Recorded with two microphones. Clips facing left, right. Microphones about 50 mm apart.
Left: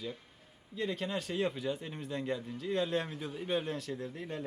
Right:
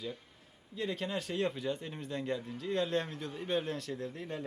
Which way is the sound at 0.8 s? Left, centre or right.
Centre.